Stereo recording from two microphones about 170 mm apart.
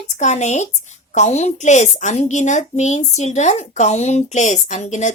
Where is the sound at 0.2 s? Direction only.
45° left (ahead or behind).